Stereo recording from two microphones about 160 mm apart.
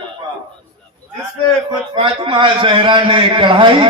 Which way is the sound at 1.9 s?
35° right (ahead or behind).